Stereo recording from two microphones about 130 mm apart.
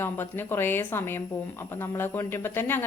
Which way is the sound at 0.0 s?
15° left (ahead or behind).